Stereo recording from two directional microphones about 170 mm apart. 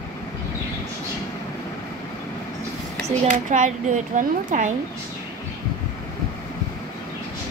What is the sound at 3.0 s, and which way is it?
Speech, 50° right (ahead or behind).